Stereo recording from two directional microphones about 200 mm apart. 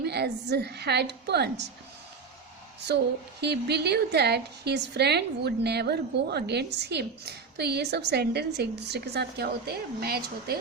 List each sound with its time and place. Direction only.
0.0 s a woman's voice: 55° right (ahead or behind)
2.9 s a sound: 55° right (ahead or behind)
3.4 s a woman's voice: 55° right (ahead or behind)